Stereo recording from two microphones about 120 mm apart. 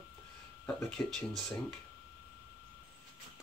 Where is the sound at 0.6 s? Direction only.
10° left (ahead or behind).